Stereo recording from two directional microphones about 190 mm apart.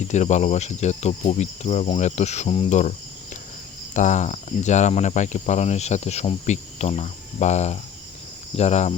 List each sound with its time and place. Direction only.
0.1 s cricket: 40° left (ahead or behind)
3.9 s cricket: 40° left (ahead or behind)